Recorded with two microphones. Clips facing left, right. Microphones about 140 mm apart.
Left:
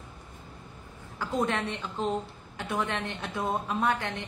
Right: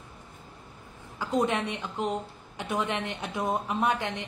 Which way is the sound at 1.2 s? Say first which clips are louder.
Right 2 dB; 15° right (ahead or behind).